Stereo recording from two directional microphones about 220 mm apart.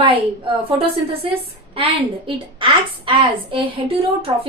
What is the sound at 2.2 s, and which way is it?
A woman's voice, 25° right (ahead or behind).